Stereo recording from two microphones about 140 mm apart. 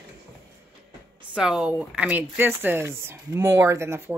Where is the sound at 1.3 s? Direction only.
5° right (ahead or behind).